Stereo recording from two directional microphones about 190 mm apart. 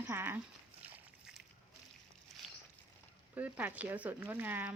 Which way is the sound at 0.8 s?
5° right (ahead or behind).